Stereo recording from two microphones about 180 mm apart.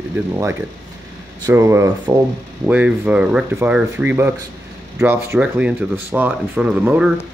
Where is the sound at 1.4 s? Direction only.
15° right (ahead or behind).